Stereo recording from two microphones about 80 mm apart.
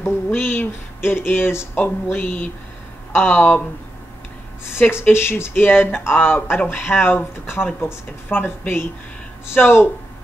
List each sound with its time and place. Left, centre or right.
0.3 s speech: left
4.7 s speech: left